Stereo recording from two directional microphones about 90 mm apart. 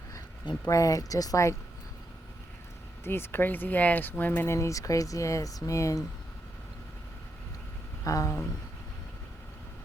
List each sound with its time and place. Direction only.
0.7 s speech: 40° left (ahead or behind)
3.0 s speech: 25° left (ahead or behind)
8.0 s speech: 40° left (ahead or behind)